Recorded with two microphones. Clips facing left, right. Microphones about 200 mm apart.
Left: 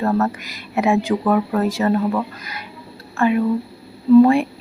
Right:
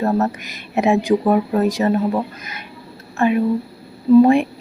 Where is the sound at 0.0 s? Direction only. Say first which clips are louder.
Right 1 dB; 20° right (ahead or behind).